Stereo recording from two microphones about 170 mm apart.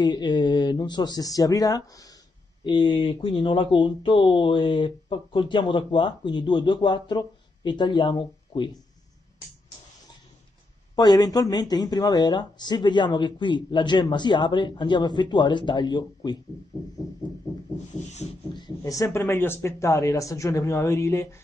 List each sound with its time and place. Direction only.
0.0 s speech: 25° left (ahead or behind)
11.0 s speech: 25° left (ahead or behind)
17.9 s a sound: 40° left (ahead or behind)
18.5 s speech: 25° left (ahead or behind)